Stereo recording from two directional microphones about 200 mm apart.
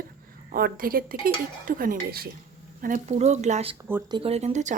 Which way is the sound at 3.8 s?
15° right (ahead or behind).